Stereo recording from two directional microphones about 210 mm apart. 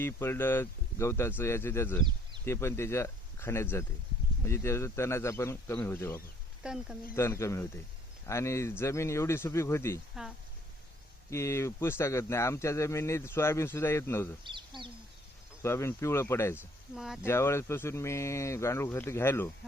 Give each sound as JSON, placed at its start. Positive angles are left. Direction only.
{"t": 0.0, "sound": "speech", "side_deg": 10}
{"t": 6.6, "sound": "speech", "side_deg": -5}
{"t": 7.2, "sound": "speech", "side_deg": 15}
{"t": 11.3, "sound": "speech", "side_deg": 15}
{"t": 14.4, "sound": "speech", "side_deg": -20}
{"t": 15.6, "sound": "speech", "side_deg": 10}
{"t": 16.9, "sound": "speech", "side_deg": 0}
{"t": 17.2, "sound": "speech", "side_deg": 10}